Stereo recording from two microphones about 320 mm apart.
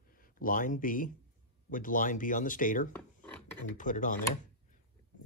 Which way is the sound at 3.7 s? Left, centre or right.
Left.